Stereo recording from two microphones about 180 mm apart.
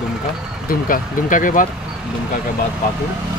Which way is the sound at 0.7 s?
50° left (ahead or behind).